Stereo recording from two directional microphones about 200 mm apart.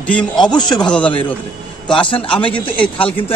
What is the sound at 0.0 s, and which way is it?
A man's voice, 5° left (ahead or behind).